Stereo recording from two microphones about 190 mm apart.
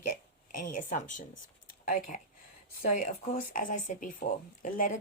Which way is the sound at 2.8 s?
40° left (ahead or behind).